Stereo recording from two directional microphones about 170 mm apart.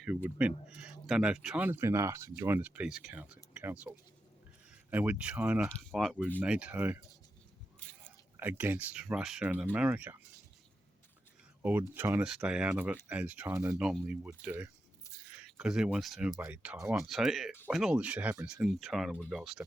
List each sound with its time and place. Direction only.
0.0 s speech: 10° right (ahead or behind)
8.4 s speech: 10° right (ahead or behind)
11.6 s speech: 10° right (ahead or behind)
15.1 s a sound: 20° left (ahead or behind)
15.4 s speech: 5° right (ahead or behind)